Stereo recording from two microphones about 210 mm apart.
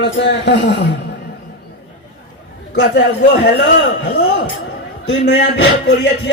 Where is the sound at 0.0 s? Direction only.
60° left (ahead or behind).